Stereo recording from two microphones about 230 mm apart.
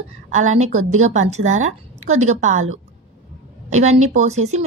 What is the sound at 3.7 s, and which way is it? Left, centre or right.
Speech, right.